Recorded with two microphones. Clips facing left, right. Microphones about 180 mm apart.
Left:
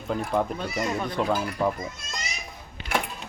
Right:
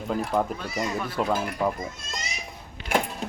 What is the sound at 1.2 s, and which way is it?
Speech, 5° right (ahead or behind).